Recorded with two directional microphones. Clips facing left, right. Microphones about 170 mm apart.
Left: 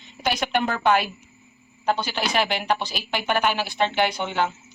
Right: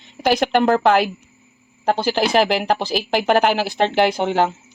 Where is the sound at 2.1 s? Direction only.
90° right.